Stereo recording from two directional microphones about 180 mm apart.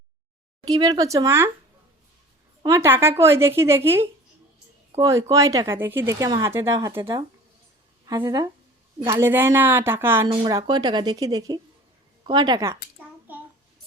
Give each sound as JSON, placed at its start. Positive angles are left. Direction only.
{"t": 0.7, "sound": "speech", "side_deg": -20}
{"t": 2.6, "sound": "a woman's voice", "side_deg": -15}
{"t": 10.2, "sound": "speech", "side_deg": -30}
{"t": 13.3, "sound": "child singing", "side_deg": -10}